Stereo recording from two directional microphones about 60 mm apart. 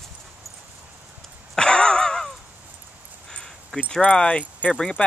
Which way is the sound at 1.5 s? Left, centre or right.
Centre.